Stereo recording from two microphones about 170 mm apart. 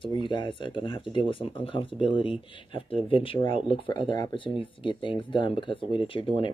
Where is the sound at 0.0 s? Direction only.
30° left (ahead or behind).